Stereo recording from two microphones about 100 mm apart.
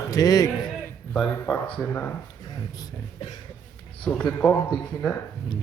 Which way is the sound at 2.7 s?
40° left (ahead or behind).